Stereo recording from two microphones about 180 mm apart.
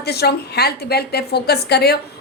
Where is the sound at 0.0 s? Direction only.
65° left (ahead or behind).